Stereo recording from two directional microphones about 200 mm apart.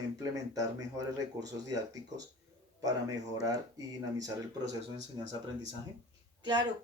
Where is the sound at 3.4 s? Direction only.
20° right (ahead or behind).